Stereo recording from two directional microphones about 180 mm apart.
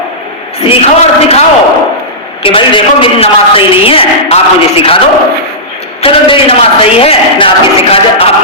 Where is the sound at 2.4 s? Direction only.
30° left (ahead or behind).